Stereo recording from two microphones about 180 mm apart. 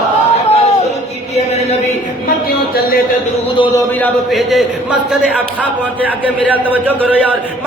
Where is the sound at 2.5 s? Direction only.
60° left (ahead or behind).